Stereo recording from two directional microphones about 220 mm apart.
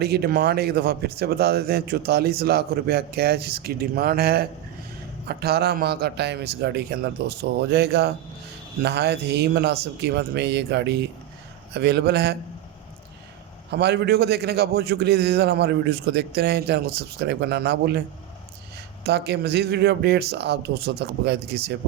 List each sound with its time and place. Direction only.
0.0 s speech: 45° right (ahead or behind)
13.7 s speech: 50° right (ahead or behind)
19.0 s speech: 50° right (ahead or behind)